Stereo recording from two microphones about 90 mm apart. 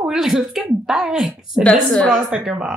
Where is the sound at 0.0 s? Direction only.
5° right (ahead or behind).